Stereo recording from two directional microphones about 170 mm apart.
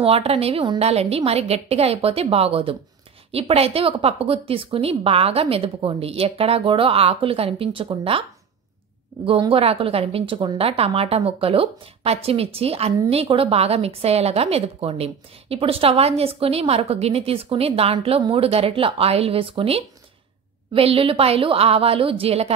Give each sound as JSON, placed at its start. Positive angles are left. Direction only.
{"t": 0.0, "sound": "a woman's voice", "side_deg": -35}